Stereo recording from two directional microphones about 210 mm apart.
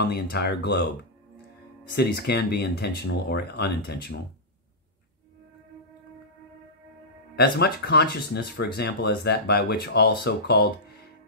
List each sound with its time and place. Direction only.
0.0 s speech: 50° left (ahead or behind)
2.0 s speech: 50° left (ahead or behind)
7.3 s speech: 50° left (ahead or behind)